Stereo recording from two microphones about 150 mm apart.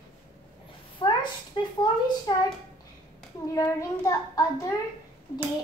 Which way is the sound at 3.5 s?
20° left (ahead or behind).